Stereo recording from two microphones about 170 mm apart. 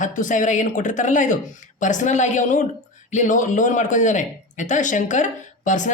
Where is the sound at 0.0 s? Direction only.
50° left (ahead or behind).